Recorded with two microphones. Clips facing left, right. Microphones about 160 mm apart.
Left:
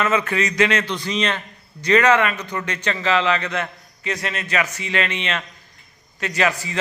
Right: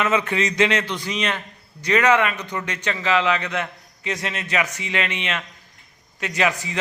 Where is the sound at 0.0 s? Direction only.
15° right (ahead or behind).